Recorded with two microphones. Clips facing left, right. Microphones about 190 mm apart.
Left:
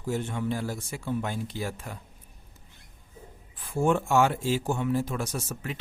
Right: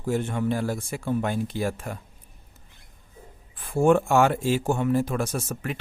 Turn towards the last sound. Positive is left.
turn(degrees=-55)  # may be behind; listen again after turning